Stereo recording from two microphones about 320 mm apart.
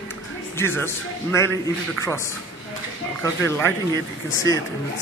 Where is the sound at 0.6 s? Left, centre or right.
Centre.